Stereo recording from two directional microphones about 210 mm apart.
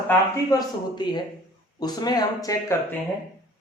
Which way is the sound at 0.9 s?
20° left (ahead or behind).